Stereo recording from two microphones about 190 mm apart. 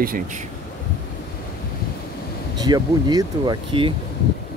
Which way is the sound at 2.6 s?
20° right (ahead or behind).